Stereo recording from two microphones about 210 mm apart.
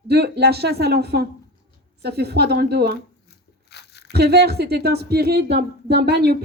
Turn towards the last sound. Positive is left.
turn(degrees=-50)  # may be behind; listen again after turning